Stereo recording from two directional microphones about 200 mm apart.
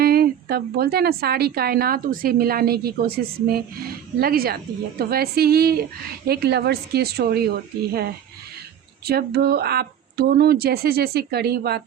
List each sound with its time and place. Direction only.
0.0 s a woman's voice: 50° right (ahead or behind)
9.0 s a woman's voice: 50° right (ahead or behind)